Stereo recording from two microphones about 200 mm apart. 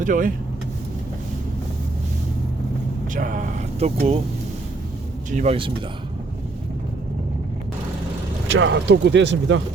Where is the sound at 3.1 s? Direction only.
40° right (ahead or behind).